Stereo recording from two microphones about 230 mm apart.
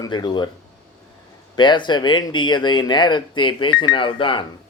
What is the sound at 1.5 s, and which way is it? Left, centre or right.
Speech, centre.